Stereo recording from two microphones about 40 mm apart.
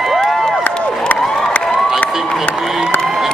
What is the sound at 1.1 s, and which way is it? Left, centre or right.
Crowd, left.